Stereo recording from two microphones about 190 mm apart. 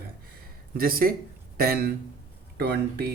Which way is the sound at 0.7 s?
50° right (ahead or behind).